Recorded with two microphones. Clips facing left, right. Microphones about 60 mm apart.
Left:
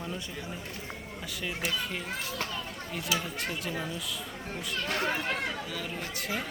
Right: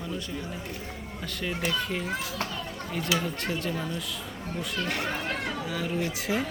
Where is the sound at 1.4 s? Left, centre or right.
Centre.